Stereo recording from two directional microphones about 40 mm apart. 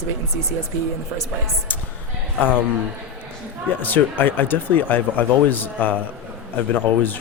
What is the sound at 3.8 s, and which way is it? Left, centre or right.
Speech, left.